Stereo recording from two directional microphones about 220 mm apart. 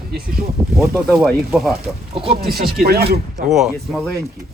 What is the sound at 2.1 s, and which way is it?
Chopping, 25° right (ahead or behind).